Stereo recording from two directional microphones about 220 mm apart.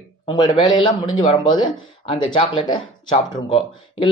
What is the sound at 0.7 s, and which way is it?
Speech, 20° left (ahead or behind).